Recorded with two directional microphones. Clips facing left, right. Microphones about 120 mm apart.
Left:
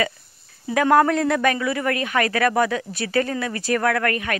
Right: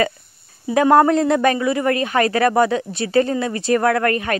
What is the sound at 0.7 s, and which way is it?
Speech, 25° right (ahead or behind).